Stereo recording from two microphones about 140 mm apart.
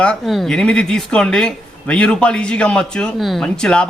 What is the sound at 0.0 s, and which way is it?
Speech, 5° left (ahead or behind).